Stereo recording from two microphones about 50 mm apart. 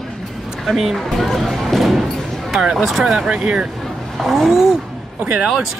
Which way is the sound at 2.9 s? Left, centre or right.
Centre.